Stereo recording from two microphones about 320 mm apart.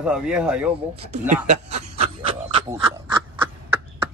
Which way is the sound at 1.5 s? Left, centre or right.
Right.